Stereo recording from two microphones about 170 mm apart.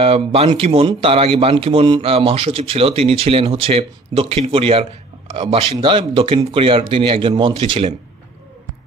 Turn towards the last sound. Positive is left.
turn(degrees=-30)  # may be behind; listen again after turning